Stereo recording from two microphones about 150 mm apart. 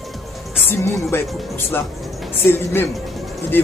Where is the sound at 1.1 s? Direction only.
15° left (ahead or behind).